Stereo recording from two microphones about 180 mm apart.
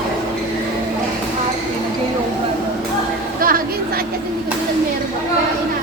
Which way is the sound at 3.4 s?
50° right (ahead or behind).